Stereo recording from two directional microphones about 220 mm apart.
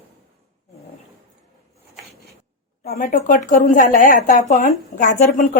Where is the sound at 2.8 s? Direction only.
40° left (ahead or behind).